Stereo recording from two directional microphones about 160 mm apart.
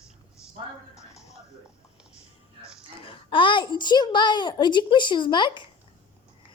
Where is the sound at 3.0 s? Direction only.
30° left (ahead or behind).